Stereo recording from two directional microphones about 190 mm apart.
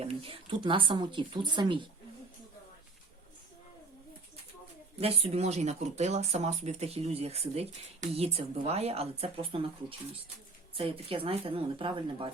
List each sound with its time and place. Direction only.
0.0 s speech: 30° right (ahead or behind)
4.9 s speech: 30° right (ahead or behind)
10.8 s speech: 30° right (ahead or behind)